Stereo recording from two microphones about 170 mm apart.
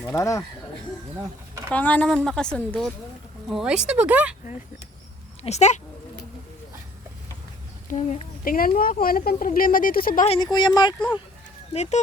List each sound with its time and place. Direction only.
0.0 s speech: 15° left (ahead or behind)
1.7 s a woman's voice: 10° left (ahead or behind); by 4.4 s 10° right (ahead or behind)
5.4 s speech: 40° left (ahead or behind)
7.9 s speech: 40° left (ahead or behind)
8.4 s speech: 55° left (ahead or behind)
10.2 s speech: 30° left (ahead or behind)
11.7 s speech: 40° left (ahead or behind)